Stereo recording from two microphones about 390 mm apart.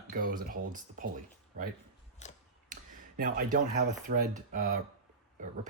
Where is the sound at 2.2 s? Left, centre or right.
Centre.